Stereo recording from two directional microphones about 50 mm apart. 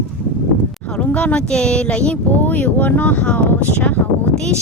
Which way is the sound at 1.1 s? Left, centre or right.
Left.